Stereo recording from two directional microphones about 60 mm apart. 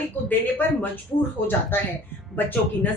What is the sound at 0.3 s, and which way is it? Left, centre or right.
Speech, left.